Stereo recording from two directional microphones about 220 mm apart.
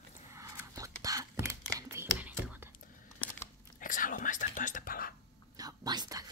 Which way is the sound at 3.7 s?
35° left (ahead or behind).